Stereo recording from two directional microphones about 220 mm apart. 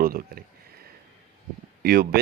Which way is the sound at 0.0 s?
40° right (ahead or behind).